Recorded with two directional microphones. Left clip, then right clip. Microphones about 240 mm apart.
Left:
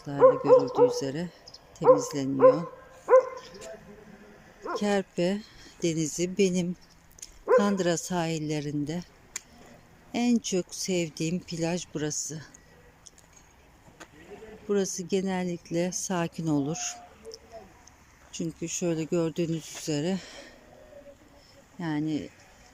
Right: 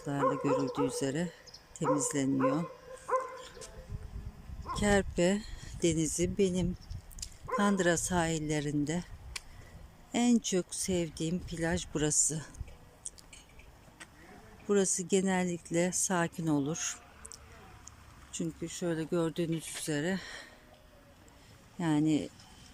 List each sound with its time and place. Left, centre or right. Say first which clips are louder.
0.2 s music: left 12 dB; left
0.9 s speech: left 2 dB; centre
3.1 s dog: left 13 dB; left
4.8 s speech: even; centre
7.2 s dog: right 1 dB; centre
7.5 s speech: left 6 dB; centre
8.9 s a sound: left 1 dB; centre
10.1 s speech: left 2 dB; centre
14.7 s speech: left 1 dB; centre
18.3 s speech: left 4 dB; centre
21.8 s speech: right 1 dB; centre